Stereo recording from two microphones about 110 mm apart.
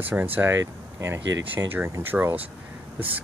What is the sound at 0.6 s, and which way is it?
Speech, 30° right (ahead or behind).